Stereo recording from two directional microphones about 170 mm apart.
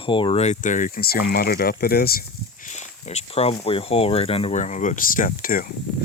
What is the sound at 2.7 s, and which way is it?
Speech, 40° left (ahead or behind).